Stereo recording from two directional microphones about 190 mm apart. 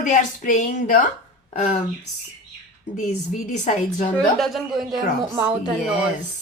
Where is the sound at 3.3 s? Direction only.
40° left (ahead or behind).